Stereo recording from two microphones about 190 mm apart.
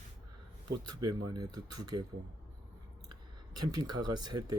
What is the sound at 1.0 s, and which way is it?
Speech, 20° right (ahead or behind).